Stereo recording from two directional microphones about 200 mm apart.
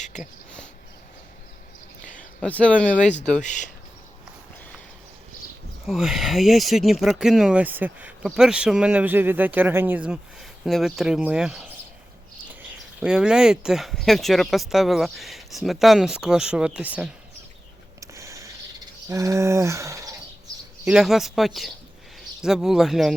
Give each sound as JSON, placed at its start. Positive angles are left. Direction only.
{"t": 0.0, "sound": "a sound", "side_deg": 35}
{"t": 2.4, "sound": "speech", "side_deg": 5}
{"t": 3.4, "sound": "speech", "side_deg": 40}
{"t": 5.8, "sound": "speech", "side_deg": 0}
{"t": 13.0, "sound": "speech", "side_deg": -5}
{"t": 18.0, "sound": "a sound", "side_deg": -15}
{"t": 20.8, "sound": "speech", "side_deg": -5}